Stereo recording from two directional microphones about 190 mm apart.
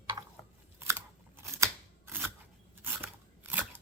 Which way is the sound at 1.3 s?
15° right (ahead or behind).